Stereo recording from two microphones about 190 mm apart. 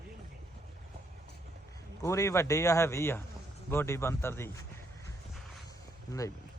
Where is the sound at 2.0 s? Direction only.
15° left (ahead or behind).